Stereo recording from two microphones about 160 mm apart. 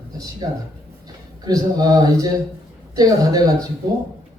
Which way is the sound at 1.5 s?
25° right (ahead or behind).